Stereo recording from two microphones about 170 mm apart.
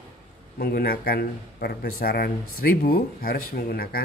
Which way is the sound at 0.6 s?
65° left (ahead or behind).